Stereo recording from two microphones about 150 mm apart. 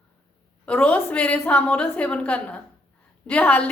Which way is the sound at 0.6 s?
10° left (ahead or behind).